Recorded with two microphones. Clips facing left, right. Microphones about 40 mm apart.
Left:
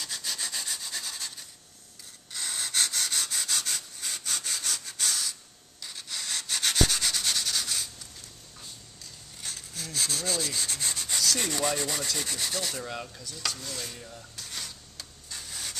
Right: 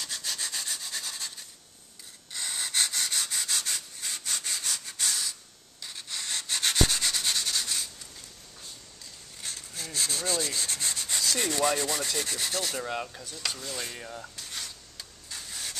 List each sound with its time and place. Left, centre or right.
0.0 s rub: centre
2.3 s sniff: centre
5.8 s sanding: centre
9.4 s rub: centre
12.8 s dishes: centre
13.9 s speech: right
14.3 s printer: centre